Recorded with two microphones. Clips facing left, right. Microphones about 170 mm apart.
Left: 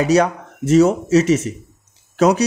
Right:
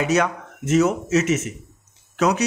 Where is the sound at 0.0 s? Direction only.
35° left (ahead or behind).